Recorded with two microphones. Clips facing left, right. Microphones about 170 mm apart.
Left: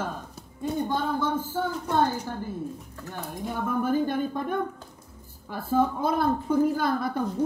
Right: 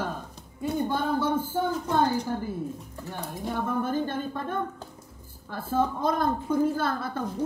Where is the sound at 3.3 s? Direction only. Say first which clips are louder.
Even; 5° left (ahead or behind).